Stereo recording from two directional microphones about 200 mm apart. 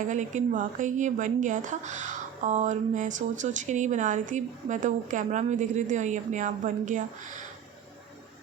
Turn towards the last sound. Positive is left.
turn(degrees=-40)  # may be behind; listen again after turning